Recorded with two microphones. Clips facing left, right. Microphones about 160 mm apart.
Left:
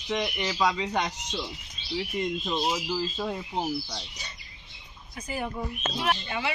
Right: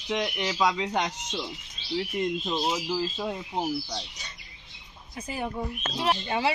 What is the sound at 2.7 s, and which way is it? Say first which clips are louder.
Speech: right 1 dB; 5° right (ahead or behind).